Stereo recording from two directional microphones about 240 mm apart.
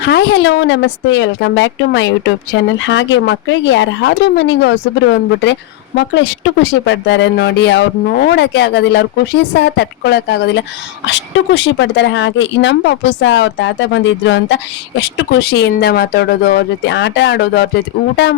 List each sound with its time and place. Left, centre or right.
0.0 s speech: left